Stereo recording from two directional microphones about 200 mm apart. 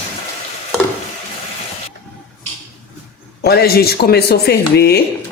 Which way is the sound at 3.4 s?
50° left (ahead or behind).